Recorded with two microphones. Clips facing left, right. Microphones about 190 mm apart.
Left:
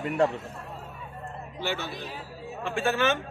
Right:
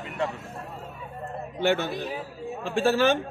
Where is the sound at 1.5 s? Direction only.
55° right (ahead or behind).